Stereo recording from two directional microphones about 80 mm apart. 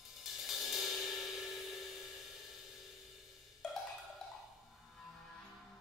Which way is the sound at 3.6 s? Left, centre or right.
Centre.